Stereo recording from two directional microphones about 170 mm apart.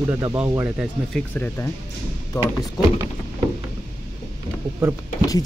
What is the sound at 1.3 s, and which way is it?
Speech, 10° left (ahead or behind).